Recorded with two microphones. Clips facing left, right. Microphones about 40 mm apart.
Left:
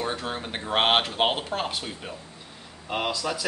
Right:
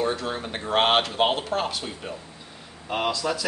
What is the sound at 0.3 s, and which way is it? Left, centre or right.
Speech, centre.